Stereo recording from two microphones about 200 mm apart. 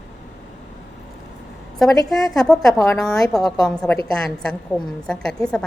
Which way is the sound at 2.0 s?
Centre (ahead or behind).